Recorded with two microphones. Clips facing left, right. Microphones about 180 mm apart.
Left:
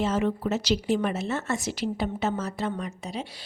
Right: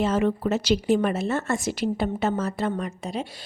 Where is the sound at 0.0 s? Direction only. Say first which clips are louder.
Right 3 dB; 55° right (ahead or behind).